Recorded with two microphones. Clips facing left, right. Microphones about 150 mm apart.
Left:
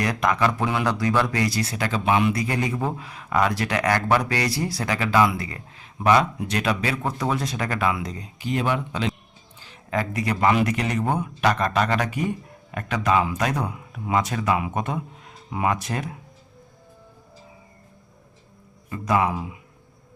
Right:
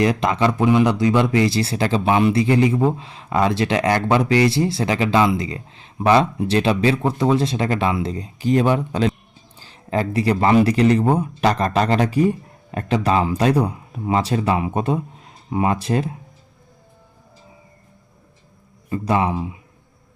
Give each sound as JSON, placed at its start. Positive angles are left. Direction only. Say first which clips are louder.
{"t": 0.0, "sound": "speech", "louder": "right 4 dB", "side_deg": -25}
{"t": 18.9, "sound": "speech", "louder": "right 3 dB", "side_deg": -30}